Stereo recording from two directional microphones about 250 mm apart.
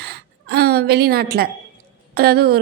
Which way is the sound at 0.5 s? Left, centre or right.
Right.